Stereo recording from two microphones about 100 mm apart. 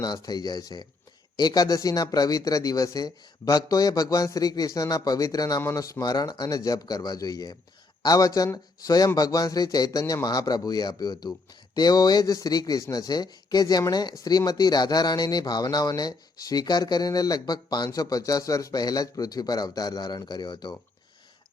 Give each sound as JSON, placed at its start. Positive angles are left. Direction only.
{"t": 0.0, "sound": "speech", "side_deg": 40}